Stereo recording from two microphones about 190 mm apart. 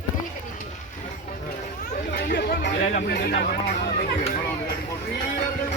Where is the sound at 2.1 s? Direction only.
55° left (ahead or behind).